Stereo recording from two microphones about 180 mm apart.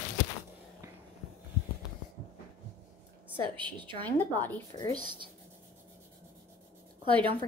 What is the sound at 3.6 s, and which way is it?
Speech, 25° right (ahead or behind).